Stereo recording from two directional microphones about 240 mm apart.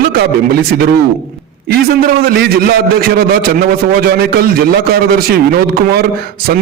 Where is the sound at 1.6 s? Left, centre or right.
Right.